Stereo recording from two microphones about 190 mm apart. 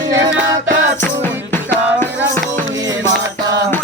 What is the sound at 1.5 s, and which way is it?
Music, 10° left (ahead or behind).